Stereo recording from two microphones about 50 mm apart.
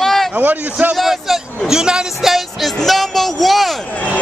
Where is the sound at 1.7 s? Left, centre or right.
Centre.